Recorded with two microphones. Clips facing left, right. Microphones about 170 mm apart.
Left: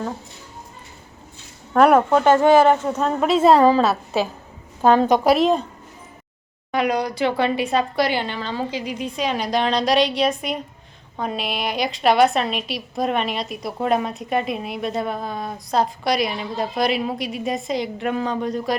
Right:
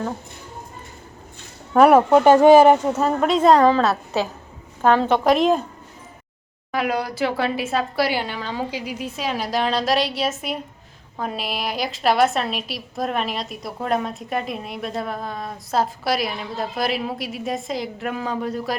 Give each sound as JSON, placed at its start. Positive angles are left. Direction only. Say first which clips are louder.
{"t": 1.7, "sound": "a woman's voice", "louder": "right 1 dB", "side_deg": -5}
{"t": 2.0, "sound": "speech", "louder": "right 3 dB", "side_deg": -15}
{"t": 2.9, "sound": "a woman's voice", "louder": "even", "side_deg": 0}
{"t": 6.7, "sound": "a woman's voice", "louder": "left 2 dB", "side_deg": -5}